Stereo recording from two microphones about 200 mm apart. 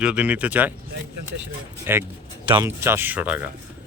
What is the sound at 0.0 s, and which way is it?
Speech, 5° right (ahead or behind).